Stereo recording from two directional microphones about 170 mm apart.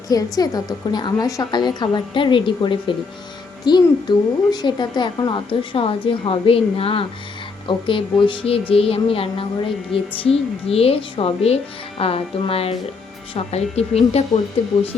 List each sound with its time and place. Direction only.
0.1 s a woman's voice: 20° left (ahead or behind); by 14.3 s 35° left (ahead or behind)